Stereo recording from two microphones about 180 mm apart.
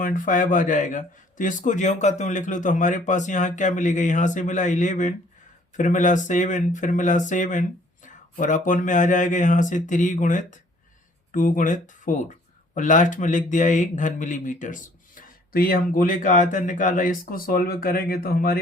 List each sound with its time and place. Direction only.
0.0 s a man's voice: 45° left (ahead or behind)